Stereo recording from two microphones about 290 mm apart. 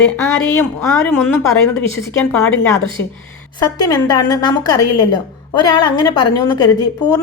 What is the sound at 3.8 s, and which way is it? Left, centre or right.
A woman's voice, centre.